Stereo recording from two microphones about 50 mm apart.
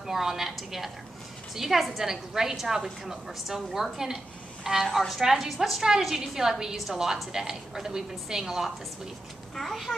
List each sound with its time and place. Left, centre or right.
0.0 s a woman's voice: centre